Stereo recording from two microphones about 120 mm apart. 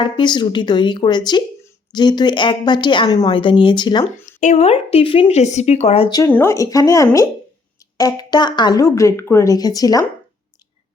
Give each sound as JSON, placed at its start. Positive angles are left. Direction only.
{"t": 0.0, "sound": "a woman's voice", "side_deg": 40}
{"t": 3.3, "sound": "speech", "side_deg": 45}
{"t": 4.4, "sound": "speech", "side_deg": 80}
{"t": 5.3, "sound": "speech", "side_deg": 70}
{"t": 6.2, "sound": "a woman's voice", "side_deg": 20}